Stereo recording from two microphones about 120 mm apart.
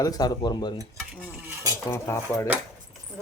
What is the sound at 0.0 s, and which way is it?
Speech, 30° left (ahead or behind).